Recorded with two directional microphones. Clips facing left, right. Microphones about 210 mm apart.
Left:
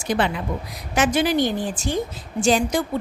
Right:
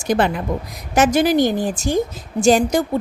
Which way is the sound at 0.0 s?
45° right (ahead or behind).